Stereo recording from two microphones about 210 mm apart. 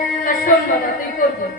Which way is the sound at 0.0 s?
40° left (ahead or behind).